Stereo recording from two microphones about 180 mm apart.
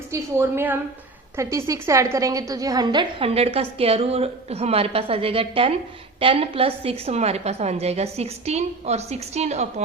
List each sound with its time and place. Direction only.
0.1 s a woman's voice: 15° right (ahead or behind); by 9.8 s 40° right (ahead or behind)